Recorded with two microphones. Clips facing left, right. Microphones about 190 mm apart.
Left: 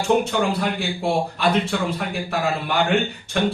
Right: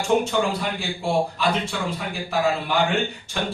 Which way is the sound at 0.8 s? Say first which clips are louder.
Left 1 dB; 60° left (ahead or behind).